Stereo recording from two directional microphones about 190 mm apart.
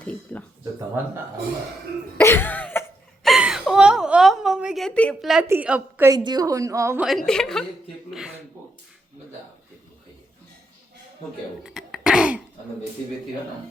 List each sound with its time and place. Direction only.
0.0 s speech: 5° left (ahead or behind)
2.1 s cough: 10° left (ahead or behind)
3.2 s a sound: 5° right (ahead or behind)
5.5 s a woman's voice: 5° right (ahead or behind)
6.1 s a woman's voice: 20° right (ahead or behind)
7.0 s a woman's voice: centre (ahead or behind)
11.6 s throat clearing: centre (ahead or behind)